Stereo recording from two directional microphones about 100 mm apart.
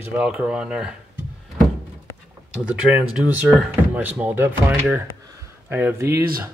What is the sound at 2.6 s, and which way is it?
Speech, 15° right (ahead or behind).